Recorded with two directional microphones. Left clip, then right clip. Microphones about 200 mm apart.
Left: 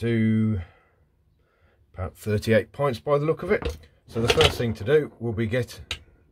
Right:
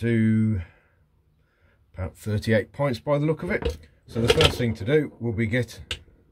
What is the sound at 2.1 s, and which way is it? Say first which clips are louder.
Speech: left 2 dB; 25° left (ahead or behind).